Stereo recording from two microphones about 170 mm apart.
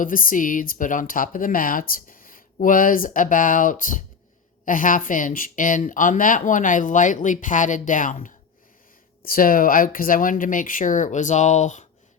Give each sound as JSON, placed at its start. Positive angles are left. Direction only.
{"t": 0.0, "sound": "speech", "side_deg": 55}